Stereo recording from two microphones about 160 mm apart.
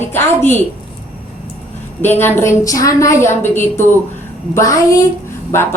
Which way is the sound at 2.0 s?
15° left (ahead or behind).